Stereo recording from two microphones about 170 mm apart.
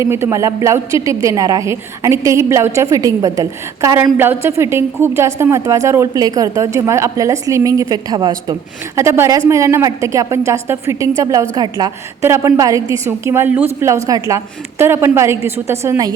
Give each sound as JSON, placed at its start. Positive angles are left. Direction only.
{"t": 0.0, "sound": "a woman's voice", "side_deg": -15}